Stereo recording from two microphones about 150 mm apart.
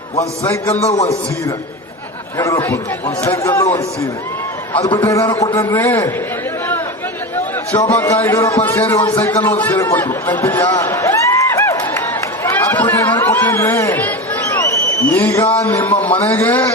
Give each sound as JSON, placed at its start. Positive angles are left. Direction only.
{"t": 0.7, "sound": "a man's voice", "side_deg": 45}
{"t": 2.4, "sound": "a man's voice", "side_deg": 20}
{"t": 4.9, "sound": "a man's voice", "side_deg": 35}
{"t": 7.9, "sound": "a man's voice", "side_deg": 15}
{"t": 10.8, "sound": "run", "side_deg": 20}
{"t": 15.0, "sound": "a man's voice", "side_deg": 10}